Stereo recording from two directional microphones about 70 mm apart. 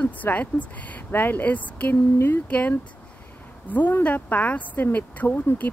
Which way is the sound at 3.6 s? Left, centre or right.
Left.